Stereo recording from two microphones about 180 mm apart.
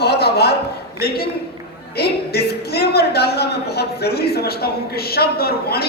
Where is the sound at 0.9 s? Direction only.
60° left (ahead or behind).